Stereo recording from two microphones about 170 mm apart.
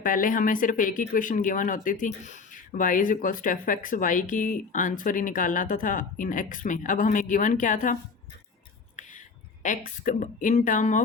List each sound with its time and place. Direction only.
0.0 s speech: 55° left (ahead or behind)
9.0 s a sound: 45° left (ahead or behind)
9.6 s speech: 50° left (ahead or behind)